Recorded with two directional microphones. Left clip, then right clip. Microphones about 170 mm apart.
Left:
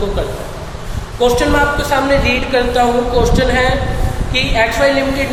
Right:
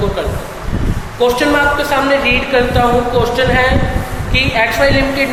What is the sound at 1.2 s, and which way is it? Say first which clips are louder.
A woman's voice: right 1 dB; centre (ahead or behind).